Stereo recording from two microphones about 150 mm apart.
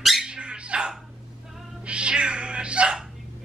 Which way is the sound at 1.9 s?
5° right (ahead or behind).